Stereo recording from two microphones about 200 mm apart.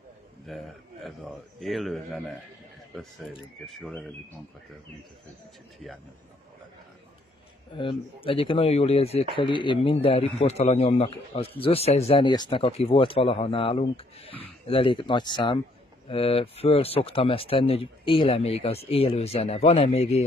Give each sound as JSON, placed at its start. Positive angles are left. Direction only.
{"t": 0.5, "sound": "a man's voice", "side_deg": 0}
{"t": 7.7, "sound": "a man's voice", "side_deg": 25}